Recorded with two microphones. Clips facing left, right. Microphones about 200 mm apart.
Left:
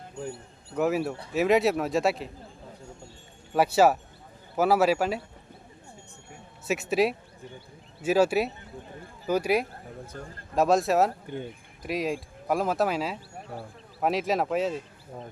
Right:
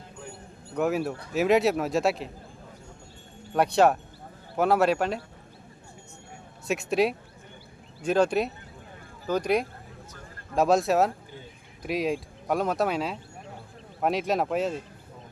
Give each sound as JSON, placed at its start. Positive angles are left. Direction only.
{"t": 0.8, "sound": "speech", "side_deg": 0}
{"t": 3.5, "sound": "speech", "side_deg": 5}
{"t": 6.7, "sound": "speech", "side_deg": 0}
{"t": 11.3, "sound": "speech", "side_deg": 60}
{"t": 11.8, "sound": "speech", "side_deg": 0}